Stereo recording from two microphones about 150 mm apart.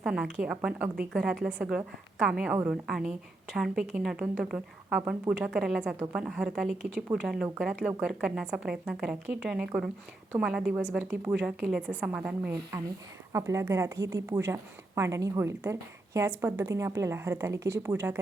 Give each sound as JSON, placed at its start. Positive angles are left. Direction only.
{"t": 0.0, "sound": "a woman's voice", "side_deg": -5}
{"t": 13.3, "sound": "a woman's voice", "side_deg": -20}